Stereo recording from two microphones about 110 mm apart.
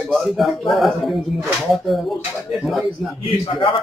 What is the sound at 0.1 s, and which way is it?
Speech, centre (ahead or behind).